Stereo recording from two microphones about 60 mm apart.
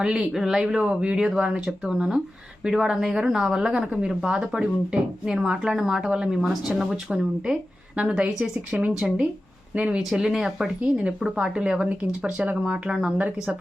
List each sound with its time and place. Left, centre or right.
0.0 s speech: centre
9.7 s speech: right
10.0 s speech: centre
10.8 s speech: right